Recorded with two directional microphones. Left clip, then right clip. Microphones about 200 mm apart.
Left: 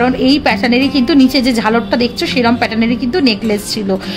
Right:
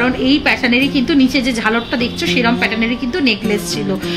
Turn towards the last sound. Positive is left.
turn(degrees=60)  # may be behind; listen again after turning